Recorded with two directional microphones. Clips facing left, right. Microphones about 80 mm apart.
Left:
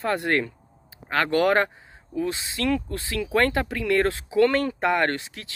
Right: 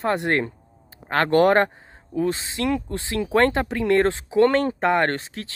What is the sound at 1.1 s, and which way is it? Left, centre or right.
Speech, right.